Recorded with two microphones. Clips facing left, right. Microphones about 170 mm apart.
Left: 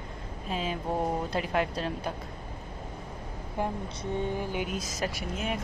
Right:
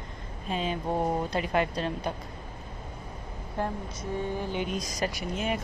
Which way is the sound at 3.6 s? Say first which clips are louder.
Even; 15° left (ahead or behind).